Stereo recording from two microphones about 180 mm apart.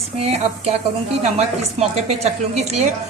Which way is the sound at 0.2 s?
35° right (ahead or behind).